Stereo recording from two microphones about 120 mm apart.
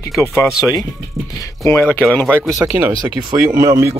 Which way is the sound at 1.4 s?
20° left (ahead or behind).